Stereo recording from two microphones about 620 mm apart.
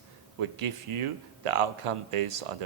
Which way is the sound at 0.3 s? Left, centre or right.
Right.